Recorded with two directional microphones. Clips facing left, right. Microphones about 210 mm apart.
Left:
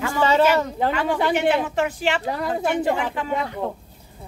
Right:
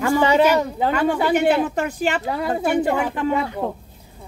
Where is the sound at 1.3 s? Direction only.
45° right (ahead or behind).